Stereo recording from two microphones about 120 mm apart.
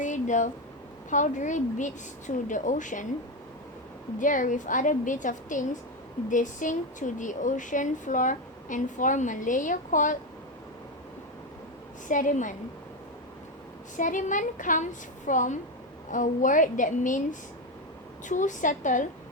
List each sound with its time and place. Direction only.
0.0 s a woman's voice: 90° left
4.2 s a woman's voice: 90° left
12.0 s a woman's voice: 90° left
13.9 s a woman's voice: 90° left
18.3 s a woman's voice: 90° left